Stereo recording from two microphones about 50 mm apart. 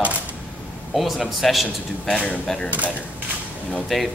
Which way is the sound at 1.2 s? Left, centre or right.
Centre.